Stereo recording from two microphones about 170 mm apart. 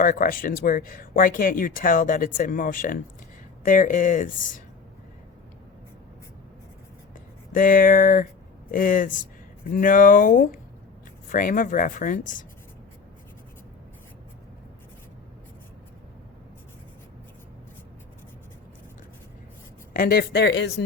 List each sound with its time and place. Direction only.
0.0 s speech: 55° left (ahead or behind)
7.5 s speech: 50° left (ahead or behind)
19.9 s speech: 60° left (ahead or behind); by 20.8 s 85° left